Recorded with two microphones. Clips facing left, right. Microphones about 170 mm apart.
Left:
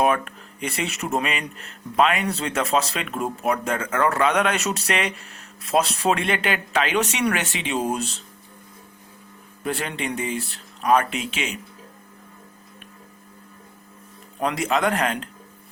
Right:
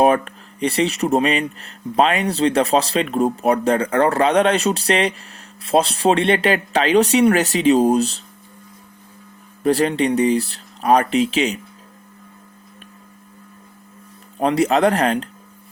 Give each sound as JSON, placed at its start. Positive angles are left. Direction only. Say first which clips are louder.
{"t": 0.0, "sound": "speech", "louder": "right 6 dB", "side_deg": -35}
{"t": 9.6, "sound": "speech", "louder": "right 11 dB", "side_deg": -35}
{"t": 14.3, "sound": "speech", "louder": "right 7 dB", "side_deg": -35}